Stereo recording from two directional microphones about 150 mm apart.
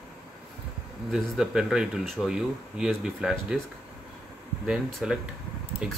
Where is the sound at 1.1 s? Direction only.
5° right (ahead or behind).